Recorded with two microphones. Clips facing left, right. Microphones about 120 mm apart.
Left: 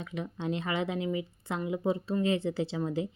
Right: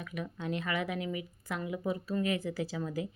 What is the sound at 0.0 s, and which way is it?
A woman's voice, 25° left (ahead or behind).